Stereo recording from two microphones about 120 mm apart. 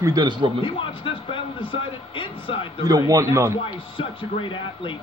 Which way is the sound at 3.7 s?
45° left (ahead or behind).